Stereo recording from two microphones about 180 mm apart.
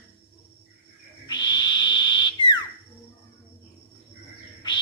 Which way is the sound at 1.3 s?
25° left (ahead or behind).